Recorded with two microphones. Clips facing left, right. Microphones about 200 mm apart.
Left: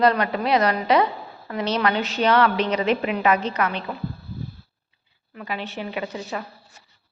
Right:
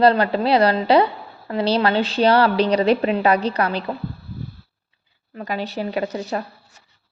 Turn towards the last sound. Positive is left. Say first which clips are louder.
# right 5 dB
turn(degrees=-40)  # may be behind; listen again after turning